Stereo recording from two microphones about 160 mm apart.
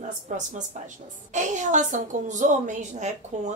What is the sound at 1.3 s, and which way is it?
A woman's voice, 50° right (ahead or behind).